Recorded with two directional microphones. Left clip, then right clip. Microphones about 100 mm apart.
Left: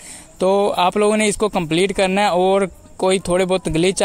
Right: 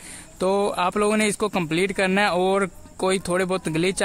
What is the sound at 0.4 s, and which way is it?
A man's voice, 20° left (ahead or behind).